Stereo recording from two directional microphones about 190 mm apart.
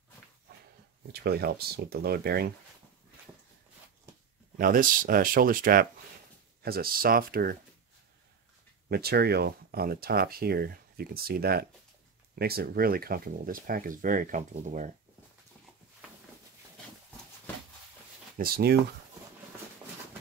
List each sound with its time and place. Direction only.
1.1 s speech: 55° right (ahead or behind)
4.6 s speech: 45° right (ahead or behind)
8.8 s speech: 55° right (ahead or behind)
18.4 s speech: 55° right (ahead or behind)